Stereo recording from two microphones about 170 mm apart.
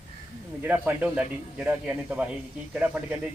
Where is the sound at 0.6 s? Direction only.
10° right (ahead or behind).